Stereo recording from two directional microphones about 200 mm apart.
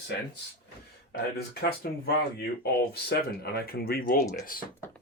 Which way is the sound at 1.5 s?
55° left (ahead or behind).